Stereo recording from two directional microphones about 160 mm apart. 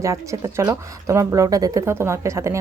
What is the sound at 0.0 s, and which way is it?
A woman's voice, 20° right (ahead or behind).